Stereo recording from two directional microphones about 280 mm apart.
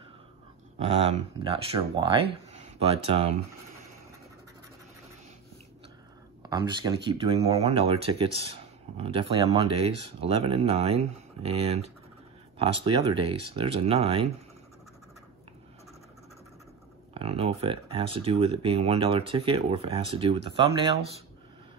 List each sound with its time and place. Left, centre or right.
0.7 s speech: centre
6.5 s speech: centre
17.1 s speech: right